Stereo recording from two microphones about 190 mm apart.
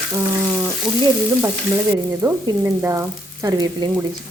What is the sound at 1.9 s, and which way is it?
A woman's voice, 15° right (ahead or behind).